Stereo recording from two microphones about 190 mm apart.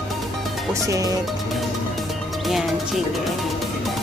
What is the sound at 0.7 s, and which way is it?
Music, 15° right (ahead or behind).